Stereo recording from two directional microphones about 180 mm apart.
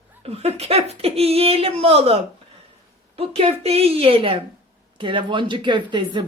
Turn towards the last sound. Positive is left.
turn(degrees=-25)  # may be behind; listen again after turning